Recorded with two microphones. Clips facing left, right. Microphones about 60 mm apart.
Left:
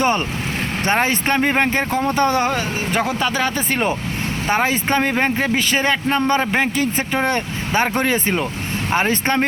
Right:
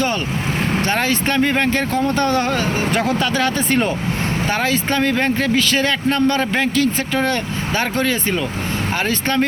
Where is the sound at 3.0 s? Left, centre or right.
Centre.